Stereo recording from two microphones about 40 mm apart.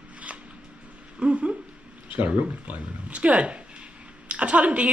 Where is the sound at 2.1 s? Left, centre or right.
Right.